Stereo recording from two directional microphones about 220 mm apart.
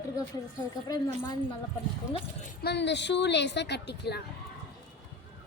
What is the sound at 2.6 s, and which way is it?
A woman's voice, 50° left (ahead or behind).